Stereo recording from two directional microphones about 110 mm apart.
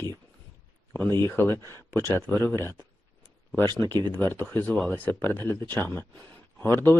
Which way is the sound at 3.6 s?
35° right (ahead or behind).